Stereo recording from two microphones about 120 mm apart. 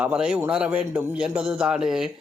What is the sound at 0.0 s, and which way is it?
Speech, 10° right (ahead or behind).